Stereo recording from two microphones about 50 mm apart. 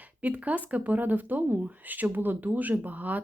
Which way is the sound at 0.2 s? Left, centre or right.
Right.